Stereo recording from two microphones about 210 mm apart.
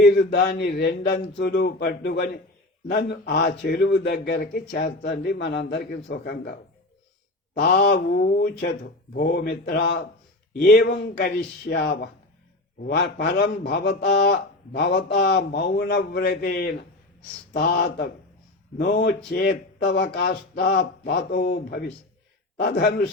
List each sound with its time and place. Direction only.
0.0 s a man's voice: 50° left (ahead or behind)
7.6 s a man's voice: 50° left (ahead or behind)